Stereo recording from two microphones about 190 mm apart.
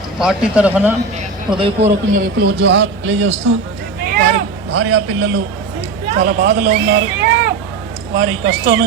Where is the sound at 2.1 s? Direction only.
60° right (ahead or behind); by 3.5 s 75° right (ahead or behind).